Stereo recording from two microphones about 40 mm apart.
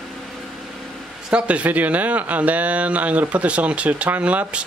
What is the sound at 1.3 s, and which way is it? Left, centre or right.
Speech, right.